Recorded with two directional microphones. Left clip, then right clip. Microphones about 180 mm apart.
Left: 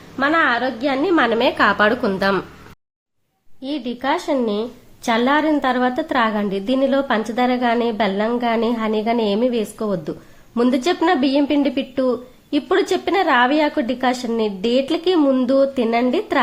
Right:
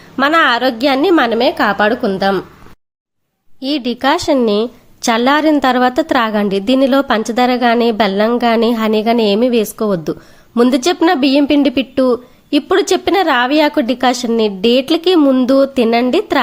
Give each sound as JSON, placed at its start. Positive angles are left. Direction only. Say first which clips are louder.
{"t": 0.2, "sound": "a woman's voice", "louder": "right 6 dB", "side_deg": -40}
{"t": 3.6, "sound": "a woman's voice", "louder": "right 8 dB", "side_deg": -25}